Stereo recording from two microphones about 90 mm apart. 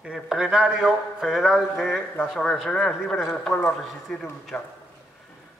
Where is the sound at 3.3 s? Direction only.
20° left (ahead or behind).